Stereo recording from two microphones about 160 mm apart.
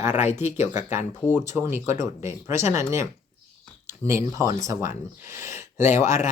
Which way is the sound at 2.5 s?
45° left (ahead or behind).